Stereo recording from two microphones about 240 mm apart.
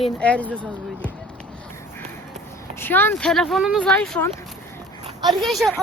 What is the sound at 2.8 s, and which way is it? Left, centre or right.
Speech, centre.